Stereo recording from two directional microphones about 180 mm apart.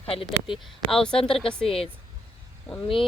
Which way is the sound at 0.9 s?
5° left (ahead or behind).